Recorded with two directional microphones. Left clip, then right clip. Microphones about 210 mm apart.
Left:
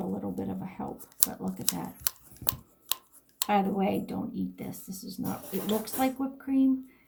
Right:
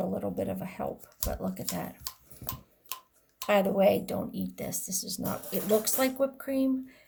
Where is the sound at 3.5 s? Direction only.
55° right (ahead or behind).